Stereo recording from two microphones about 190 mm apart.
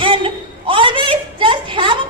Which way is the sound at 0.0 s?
25° right (ahead or behind).